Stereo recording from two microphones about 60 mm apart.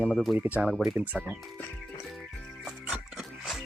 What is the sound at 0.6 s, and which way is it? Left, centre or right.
Speech, centre.